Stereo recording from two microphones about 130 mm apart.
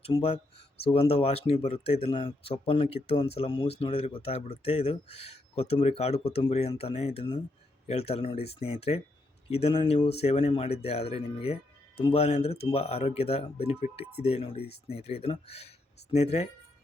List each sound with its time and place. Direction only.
0.1 s speech: 50° left (ahead or behind)